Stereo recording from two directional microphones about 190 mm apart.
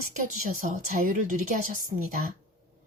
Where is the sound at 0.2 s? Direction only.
45° right (ahead or behind).